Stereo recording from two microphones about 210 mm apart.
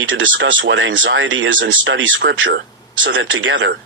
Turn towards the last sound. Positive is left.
turn(degrees=-65)  # may be behind; listen again after turning